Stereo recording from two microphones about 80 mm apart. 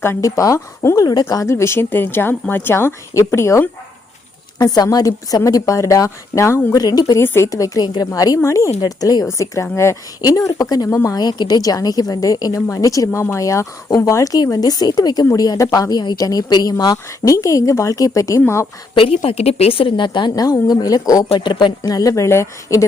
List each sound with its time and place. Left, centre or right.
0.0 s a woman's voice: left
0.9 s a woman's voice: left
4.5 s a woman's voice: left
6.7 s a woman's voice: left
7.2 s a woman's voice: left
7.5 s a woman's voice: left
8.4 s a woman's voice: left
8.8 s a woman's voice: left
10.2 s a woman's voice: left
17.3 s a woman's voice: left
20.0 s a woman's voice: left
20.3 s a woman's voice: left
21.4 s speech: left
21.9 s a woman's voice: left